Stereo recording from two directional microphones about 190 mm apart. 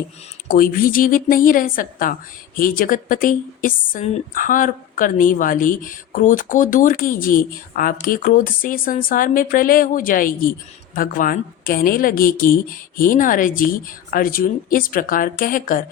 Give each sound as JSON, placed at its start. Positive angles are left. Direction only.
{"t": 0.4, "sound": "speech", "side_deg": 50}